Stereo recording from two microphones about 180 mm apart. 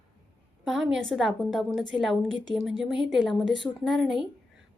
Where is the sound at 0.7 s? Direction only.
Centre (ahead or behind).